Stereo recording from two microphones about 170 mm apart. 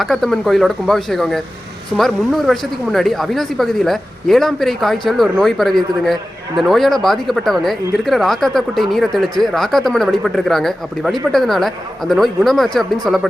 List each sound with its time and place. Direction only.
0.0 s speech: centre (ahead or behind)